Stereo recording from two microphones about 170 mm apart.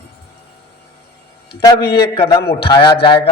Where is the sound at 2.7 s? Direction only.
25° left (ahead or behind).